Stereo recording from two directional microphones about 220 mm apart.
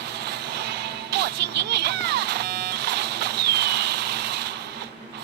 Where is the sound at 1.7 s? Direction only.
50° right (ahead or behind).